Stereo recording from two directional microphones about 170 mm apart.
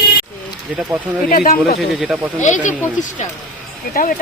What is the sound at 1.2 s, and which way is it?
Speech, 55° left (ahead or behind).